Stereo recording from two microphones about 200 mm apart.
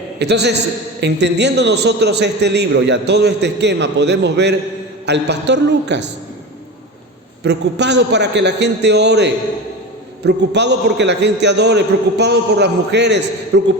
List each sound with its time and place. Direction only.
0.2 s a man's voice: 55° right (ahead or behind)
7.4 s a man's voice: 55° right (ahead or behind)